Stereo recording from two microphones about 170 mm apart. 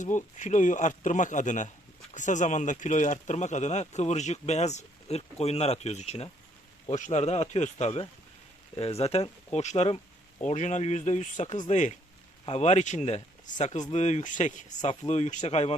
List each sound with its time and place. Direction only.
0.0 s speech: 45° left (ahead or behind)